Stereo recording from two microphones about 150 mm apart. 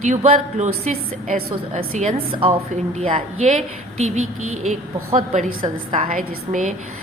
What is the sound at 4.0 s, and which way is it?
Speech, 50° right (ahead or behind).